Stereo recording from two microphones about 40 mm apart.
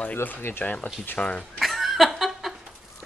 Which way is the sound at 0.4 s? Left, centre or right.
Left.